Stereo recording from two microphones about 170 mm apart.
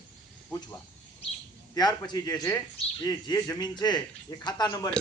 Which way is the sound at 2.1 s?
25° left (ahead or behind).